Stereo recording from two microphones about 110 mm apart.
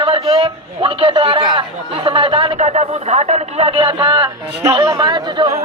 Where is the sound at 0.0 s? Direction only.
55° right (ahead or behind).